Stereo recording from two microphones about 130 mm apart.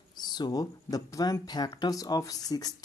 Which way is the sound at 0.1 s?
35° left (ahead or behind).